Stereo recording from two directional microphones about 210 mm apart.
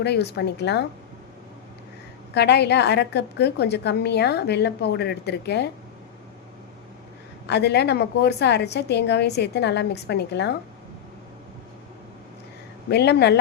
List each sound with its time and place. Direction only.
0.0 s a woman's voice: 50° left (ahead or behind)
2.3 s a woman's voice: 55° left (ahead or behind)
7.4 s a woman's voice: 55° left (ahead or behind)
12.9 s a woman's voice: 50° left (ahead or behind)